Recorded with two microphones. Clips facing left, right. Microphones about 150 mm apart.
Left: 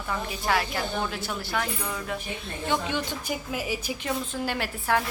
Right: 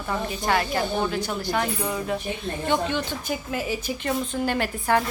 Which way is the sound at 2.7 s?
10° left (ahead or behind).